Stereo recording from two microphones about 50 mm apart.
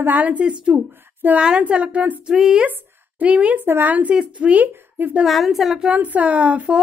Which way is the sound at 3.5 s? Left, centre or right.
Right.